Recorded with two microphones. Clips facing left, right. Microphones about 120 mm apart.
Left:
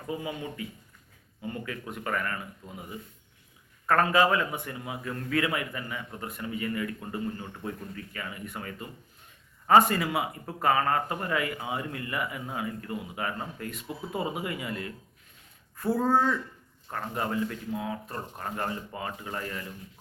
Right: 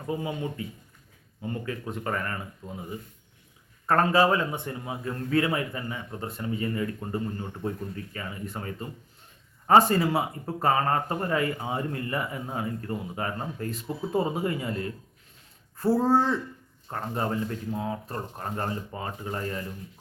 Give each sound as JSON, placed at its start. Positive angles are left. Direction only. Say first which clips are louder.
{"t": 0.2, "sound": "speech", "louder": "right 3 dB", "side_deg": -30}
{"t": 3.8, "sound": "speech", "louder": "right 2 dB", "side_deg": -30}